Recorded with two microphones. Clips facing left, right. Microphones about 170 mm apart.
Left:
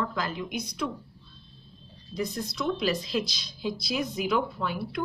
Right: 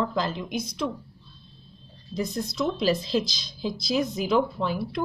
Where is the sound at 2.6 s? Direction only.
30° right (ahead or behind).